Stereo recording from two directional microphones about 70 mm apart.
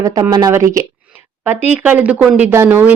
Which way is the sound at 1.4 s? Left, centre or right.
Right.